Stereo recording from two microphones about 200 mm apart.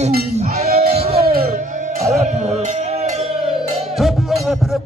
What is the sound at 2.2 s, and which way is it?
Music, 35° right (ahead or behind).